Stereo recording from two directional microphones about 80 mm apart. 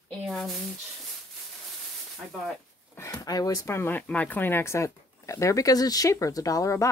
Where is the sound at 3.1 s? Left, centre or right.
Left.